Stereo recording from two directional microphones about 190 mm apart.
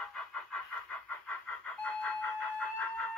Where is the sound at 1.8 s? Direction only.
5° left (ahead or behind).